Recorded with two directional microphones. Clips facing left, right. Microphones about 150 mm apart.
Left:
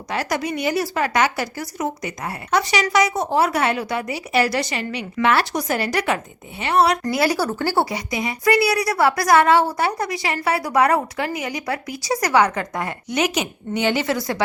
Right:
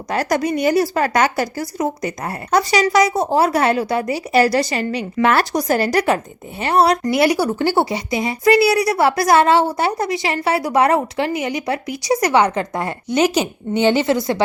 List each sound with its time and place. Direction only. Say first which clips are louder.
0.1 s a woman's voice: right 5 dB; 45° right (ahead or behind)
7.0 s speech: right 4 dB; 20° right (ahead or behind)